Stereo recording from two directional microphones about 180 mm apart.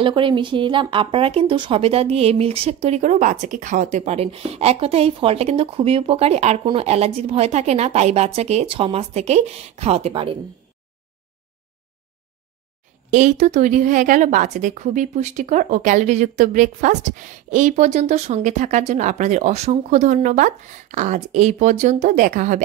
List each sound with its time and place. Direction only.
0.0 s speech: 25° right (ahead or behind)
13.1 s speech: 45° right (ahead or behind)